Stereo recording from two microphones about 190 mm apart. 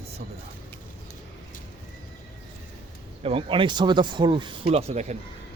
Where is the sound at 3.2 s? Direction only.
30° right (ahead or behind).